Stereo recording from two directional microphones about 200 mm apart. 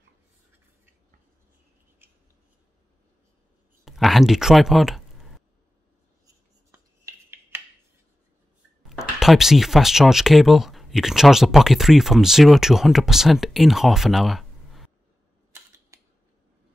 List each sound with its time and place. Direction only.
3.8 s speech: centre (ahead or behind)
6.2 s a sound: 15° right (ahead or behind)
9.2 s speech: centre (ahead or behind)
15.9 s scissors: 15° right (ahead or behind)